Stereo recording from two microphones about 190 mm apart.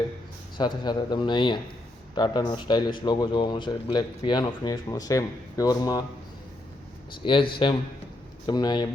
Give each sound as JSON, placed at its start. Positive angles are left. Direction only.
{"t": 0.5, "sound": "speech", "side_deg": 25}
{"t": 7.3, "sound": "speech", "side_deg": 25}